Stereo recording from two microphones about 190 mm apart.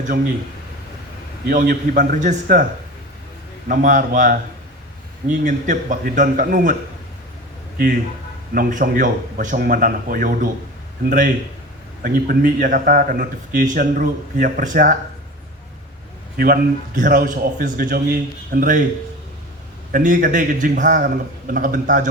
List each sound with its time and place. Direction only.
1.5 s a man's voice: 45° right (ahead or behind)
3.7 s a man's voice: 45° right (ahead or behind)
8.5 s a man's voice: 50° right (ahead or behind)
16.4 s a man's voice: 50° right (ahead or behind)
19.9 s a man's voice: 45° right (ahead or behind)